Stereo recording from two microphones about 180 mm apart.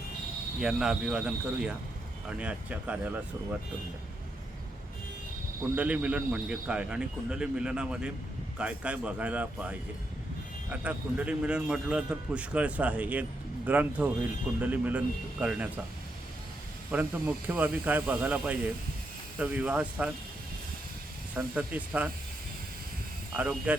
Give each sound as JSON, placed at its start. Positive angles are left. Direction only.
{"t": 0.6, "sound": "a man's voice", "side_deg": -5}
{"t": 5.7, "sound": "a man's voice", "side_deg": -10}
{"t": 16.9, "sound": "a man's voice", "side_deg": -10}
{"t": 21.3, "sound": "a man's voice", "side_deg": -10}
{"t": 23.3, "sound": "a man's voice", "side_deg": -10}